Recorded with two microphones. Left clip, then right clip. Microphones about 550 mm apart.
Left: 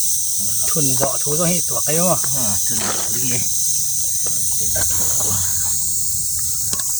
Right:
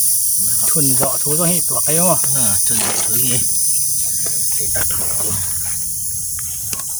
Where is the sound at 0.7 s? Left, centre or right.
Right.